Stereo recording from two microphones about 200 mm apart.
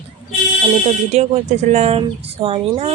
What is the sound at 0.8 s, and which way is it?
Speech, 35° right (ahead or behind).